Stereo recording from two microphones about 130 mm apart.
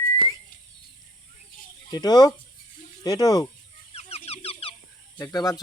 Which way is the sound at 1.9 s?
30° left (ahead or behind).